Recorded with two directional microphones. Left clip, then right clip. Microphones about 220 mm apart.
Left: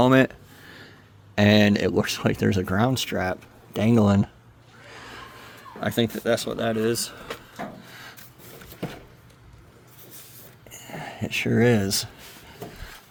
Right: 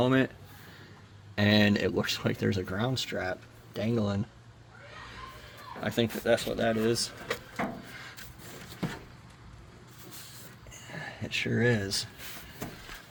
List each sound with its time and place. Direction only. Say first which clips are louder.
0.0 s speech: left 8 dB; 50° left (ahead or behind)
1.4 s speech: left 6 dB; 30° left (ahead or behind); by 4.3 s 55° left (ahead or behind)
5.8 s speech: left 5 dB; 40° left (ahead or behind)
10.7 s a sound: left 5 dB; 50° left (ahead or behind)